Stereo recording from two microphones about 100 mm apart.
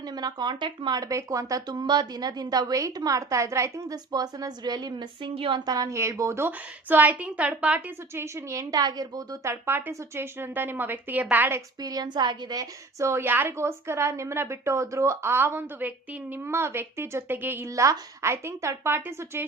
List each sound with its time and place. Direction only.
0.1 s speech: 45° right (ahead or behind); by 5.6 s 60° right (ahead or behind)
5.6 s a woman's voice: 40° right (ahead or behind); by 7.8 s 10° right (ahead or behind)
8.1 s a woman's voice: 25° right (ahead or behind)
11.8 s a woman's voice: 40° right (ahead or behind); by 17.7 s 20° right (ahead or behind)
17.7 s a woman's voice: 35° right (ahead or behind)